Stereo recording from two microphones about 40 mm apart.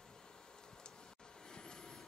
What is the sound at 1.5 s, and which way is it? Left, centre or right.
Vehicle, centre.